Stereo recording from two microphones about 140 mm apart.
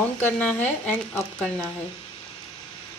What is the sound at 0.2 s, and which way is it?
Speech, 10° left (ahead or behind).